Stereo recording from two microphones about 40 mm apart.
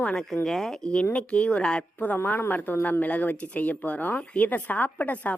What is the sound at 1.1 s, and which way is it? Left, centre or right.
Speech, left.